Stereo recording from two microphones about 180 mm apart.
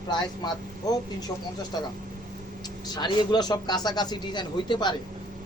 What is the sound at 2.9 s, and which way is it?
Speech, 25° left (ahead or behind).